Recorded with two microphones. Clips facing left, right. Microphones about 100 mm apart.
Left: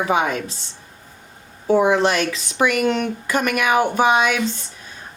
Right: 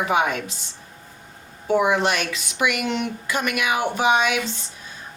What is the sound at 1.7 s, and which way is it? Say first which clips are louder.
Speech: left 3 dB; 35° left (ahead or behind).